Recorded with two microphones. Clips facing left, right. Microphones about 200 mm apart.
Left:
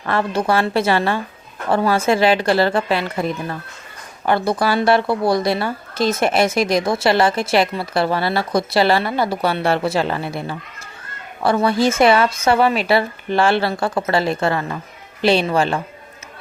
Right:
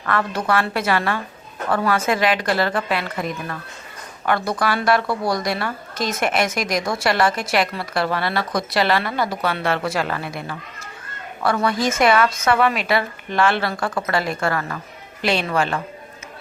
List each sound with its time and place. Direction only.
0.0 s a woman's voice: 30° left (ahead or behind)